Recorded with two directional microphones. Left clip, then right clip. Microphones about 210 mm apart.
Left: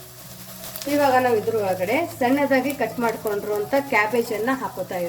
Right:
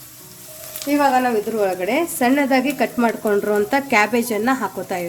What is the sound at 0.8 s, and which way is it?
Speech, 15° left (ahead or behind).